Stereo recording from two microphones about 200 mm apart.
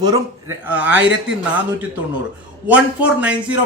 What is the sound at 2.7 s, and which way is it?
Speech, 5° right (ahead or behind).